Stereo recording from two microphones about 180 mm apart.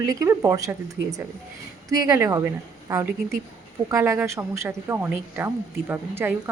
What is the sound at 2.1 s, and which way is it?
Speech, 20° right (ahead or behind).